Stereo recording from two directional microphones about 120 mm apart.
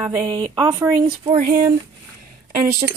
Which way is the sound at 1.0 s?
55° right (ahead or behind).